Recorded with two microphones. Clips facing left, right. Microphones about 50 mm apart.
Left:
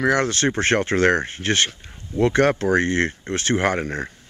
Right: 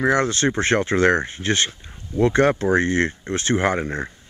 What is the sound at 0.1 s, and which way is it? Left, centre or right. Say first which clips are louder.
Speech: right 1 dB; left.